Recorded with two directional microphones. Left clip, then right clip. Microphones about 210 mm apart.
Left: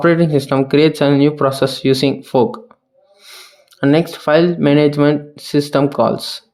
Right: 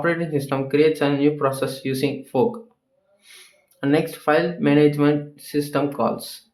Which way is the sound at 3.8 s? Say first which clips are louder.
Left 7 dB; 35° left (ahead or behind).